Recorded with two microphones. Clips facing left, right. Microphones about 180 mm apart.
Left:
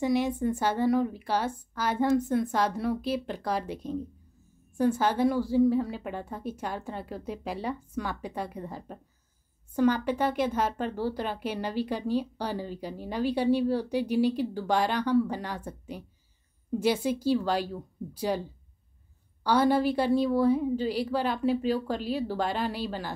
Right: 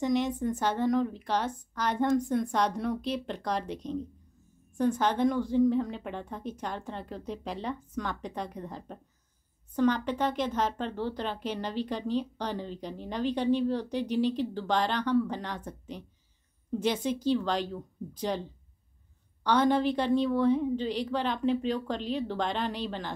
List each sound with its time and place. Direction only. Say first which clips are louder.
0.0 s speech: left 2 dB; 10° left (ahead or behind)